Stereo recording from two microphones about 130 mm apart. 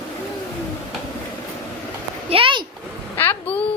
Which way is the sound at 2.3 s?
45° right (ahead or behind).